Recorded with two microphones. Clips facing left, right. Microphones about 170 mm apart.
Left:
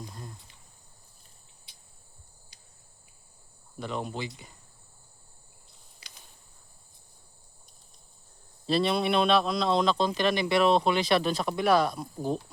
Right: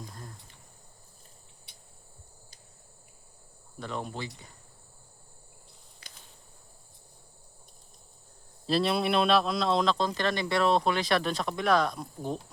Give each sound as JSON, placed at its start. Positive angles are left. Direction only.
{"t": 3.8, "sound": "speech", "side_deg": 0}
{"t": 8.6, "sound": "speech", "side_deg": 0}
{"t": 10.6, "sound": "speech", "side_deg": 25}
{"t": 10.9, "sound": "speech", "side_deg": 0}